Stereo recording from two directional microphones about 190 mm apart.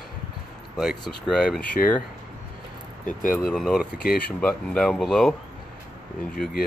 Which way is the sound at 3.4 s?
Centre (ahead or behind).